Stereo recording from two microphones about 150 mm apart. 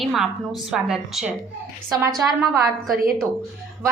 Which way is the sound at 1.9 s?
20° right (ahead or behind).